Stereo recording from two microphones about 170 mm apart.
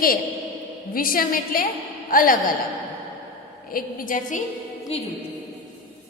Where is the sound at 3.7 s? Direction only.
55° left (ahead or behind).